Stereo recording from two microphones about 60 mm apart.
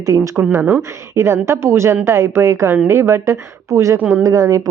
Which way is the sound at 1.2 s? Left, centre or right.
Right.